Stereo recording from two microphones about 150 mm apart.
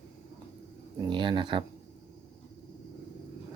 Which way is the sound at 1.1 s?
30° right (ahead or behind).